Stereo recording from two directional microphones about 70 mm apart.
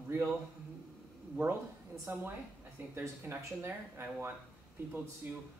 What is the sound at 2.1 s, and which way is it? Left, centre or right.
Speech, right.